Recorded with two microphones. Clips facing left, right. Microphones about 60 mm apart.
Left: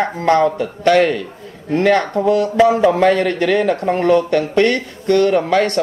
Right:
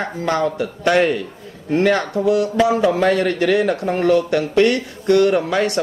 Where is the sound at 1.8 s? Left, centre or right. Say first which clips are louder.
Left 2 dB; left.